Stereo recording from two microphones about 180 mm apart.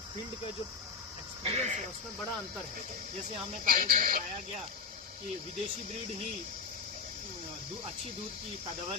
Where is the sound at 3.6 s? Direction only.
55° right (ahead or behind).